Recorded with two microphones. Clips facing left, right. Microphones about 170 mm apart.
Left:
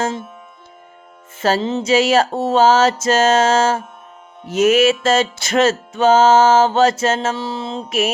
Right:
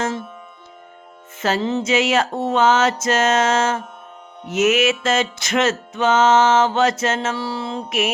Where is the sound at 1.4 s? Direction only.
30° left (ahead or behind).